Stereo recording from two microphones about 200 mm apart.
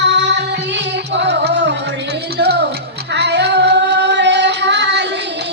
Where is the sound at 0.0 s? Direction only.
60° right (ahead or behind).